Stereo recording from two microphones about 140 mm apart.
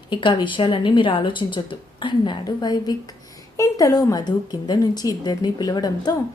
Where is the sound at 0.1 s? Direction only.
35° left (ahead or behind).